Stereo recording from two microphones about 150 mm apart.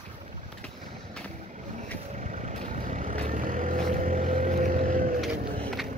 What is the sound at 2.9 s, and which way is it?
Vehicle, 55° right (ahead or behind).